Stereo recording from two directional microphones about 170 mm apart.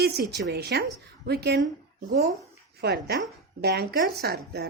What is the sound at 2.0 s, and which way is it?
Speech, 60° right (ahead or behind).